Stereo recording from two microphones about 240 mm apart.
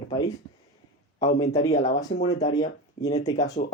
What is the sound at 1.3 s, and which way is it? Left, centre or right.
Speech, centre.